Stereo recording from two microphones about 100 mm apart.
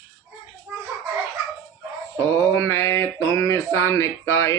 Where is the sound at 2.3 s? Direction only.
25° left (ahead or behind).